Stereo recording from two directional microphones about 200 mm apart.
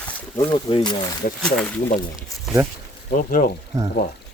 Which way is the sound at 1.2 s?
40° left (ahead or behind).